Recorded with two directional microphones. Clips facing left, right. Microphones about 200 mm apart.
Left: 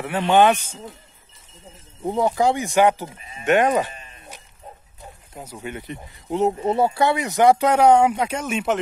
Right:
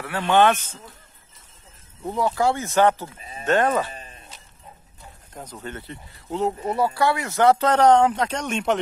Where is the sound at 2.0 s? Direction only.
20° left (ahead or behind).